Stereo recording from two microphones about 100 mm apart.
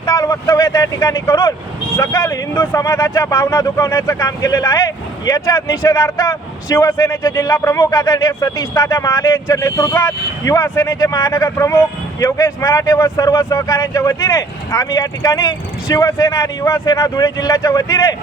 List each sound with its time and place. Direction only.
0.0 s speech: 35° left (ahead or behind)